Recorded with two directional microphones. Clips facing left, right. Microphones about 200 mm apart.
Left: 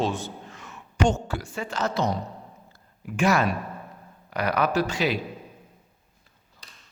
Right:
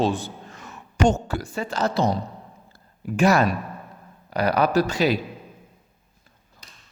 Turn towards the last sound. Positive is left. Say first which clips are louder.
# right 4 dB
turn(degrees=-40)  # may be behind; listen again after turning